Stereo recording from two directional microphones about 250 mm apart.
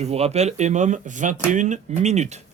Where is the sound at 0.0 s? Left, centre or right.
Right.